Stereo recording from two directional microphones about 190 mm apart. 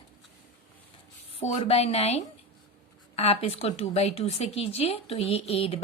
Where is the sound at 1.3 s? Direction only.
35° left (ahead or behind).